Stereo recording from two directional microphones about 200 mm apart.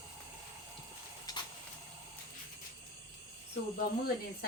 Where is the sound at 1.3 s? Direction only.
20° left (ahead or behind).